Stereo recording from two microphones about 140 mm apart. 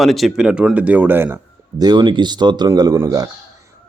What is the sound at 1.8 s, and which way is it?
Speech, 30° right (ahead or behind).